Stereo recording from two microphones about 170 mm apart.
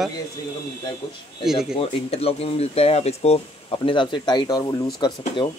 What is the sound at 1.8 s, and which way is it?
Speech, 35° left (ahead or behind).